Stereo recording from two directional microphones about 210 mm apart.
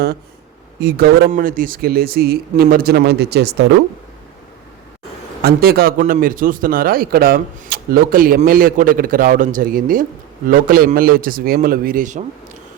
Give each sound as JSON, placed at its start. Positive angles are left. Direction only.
{"t": 0.8, "sound": "a man's voice", "side_deg": -50}
{"t": 5.4, "sound": "a man's voice", "side_deg": -45}